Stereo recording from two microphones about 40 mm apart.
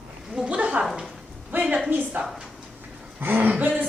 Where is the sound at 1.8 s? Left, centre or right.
Right.